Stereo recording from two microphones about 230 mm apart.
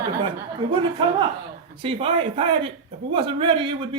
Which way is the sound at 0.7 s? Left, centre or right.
Right.